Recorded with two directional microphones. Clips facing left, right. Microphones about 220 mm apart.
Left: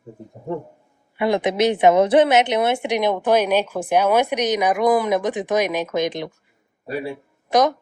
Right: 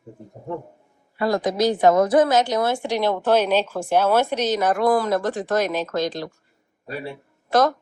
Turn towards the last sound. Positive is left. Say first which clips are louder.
# left 1 dB
turn(degrees=15)  # may be behind; listen again after turning